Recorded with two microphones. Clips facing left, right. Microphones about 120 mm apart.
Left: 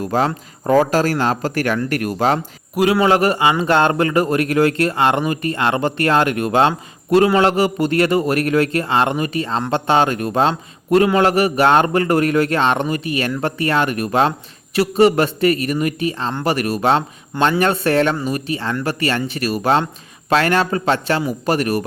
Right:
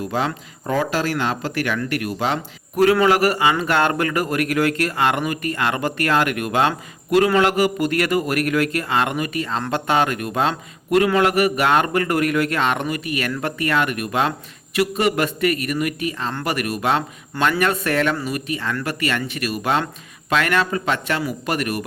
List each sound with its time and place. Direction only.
0.0 s speech: 40° left (ahead or behind)
2.7 s a man's voice: 10° left (ahead or behind)
3.0 s a man's voice: 25° left (ahead or behind)